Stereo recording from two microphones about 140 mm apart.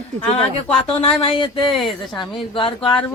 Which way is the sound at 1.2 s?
35° left (ahead or behind).